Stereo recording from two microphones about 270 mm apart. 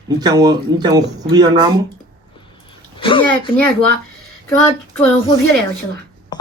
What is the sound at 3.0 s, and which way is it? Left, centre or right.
Speech, centre.